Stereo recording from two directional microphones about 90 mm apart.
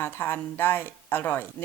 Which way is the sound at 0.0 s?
25° left (ahead or behind).